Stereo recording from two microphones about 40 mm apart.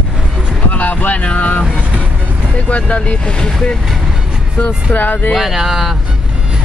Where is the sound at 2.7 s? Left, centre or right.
Left.